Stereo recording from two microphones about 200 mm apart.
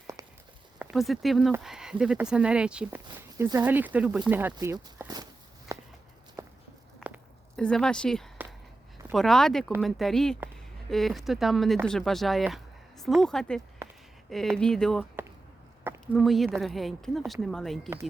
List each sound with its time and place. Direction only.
0.2 s a sound: 15° right (ahead or behind)
0.8 s speech: centre (ahead or behind)
4.5 s walk: 15° right (ahead or behind)
7.5 s speech: 5° left (ahead or behind)
16.1 s speech: centre (ahead or behind)